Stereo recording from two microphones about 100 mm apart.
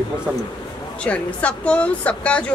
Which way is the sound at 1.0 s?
15° left (ahead or behind).